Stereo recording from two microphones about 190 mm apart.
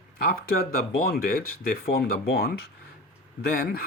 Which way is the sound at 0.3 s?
55° left (ahead or behind).